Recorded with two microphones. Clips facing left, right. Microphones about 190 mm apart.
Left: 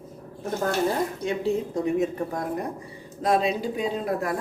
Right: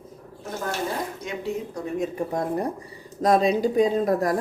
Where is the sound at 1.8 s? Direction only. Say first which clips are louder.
Left 6 dB; 25° left (ahead or behind).